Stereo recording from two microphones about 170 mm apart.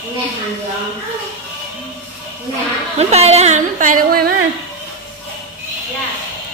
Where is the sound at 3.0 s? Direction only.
40° right (ahead or behind); by 4.3 s 55° right (ahead or behind).